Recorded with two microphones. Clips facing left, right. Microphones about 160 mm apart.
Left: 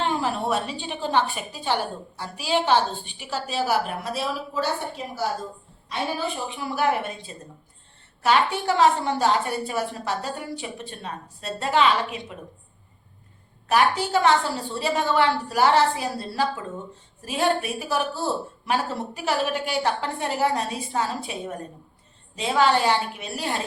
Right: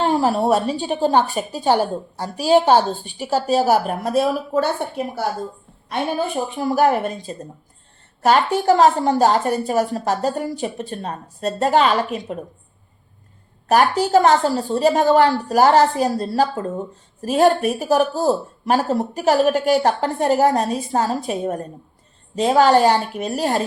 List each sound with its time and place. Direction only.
0.0 s a woman's voice: 40° right (ahead or behind)
13.7 s a woman's voice: 40° right (ahead or behind)